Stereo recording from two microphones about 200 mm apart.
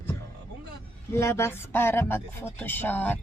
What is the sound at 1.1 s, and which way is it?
Speech, 15° left (ahead or behind).